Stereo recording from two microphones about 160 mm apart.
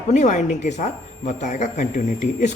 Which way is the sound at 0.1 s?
45° left (ahead or behind).